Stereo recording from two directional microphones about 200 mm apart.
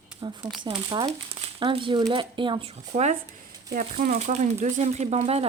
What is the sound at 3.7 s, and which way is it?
Speech, 40° right (ahead or behind).